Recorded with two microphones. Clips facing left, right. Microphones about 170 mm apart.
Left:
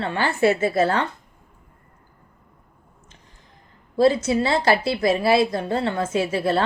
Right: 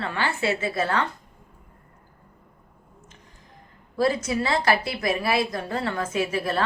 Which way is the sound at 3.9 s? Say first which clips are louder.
Left 5 dB; 30° left (ahead or behind).